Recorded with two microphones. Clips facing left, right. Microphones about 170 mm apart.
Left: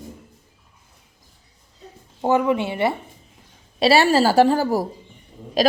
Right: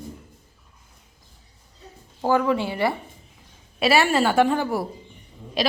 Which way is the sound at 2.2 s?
20° left (ahead or behind).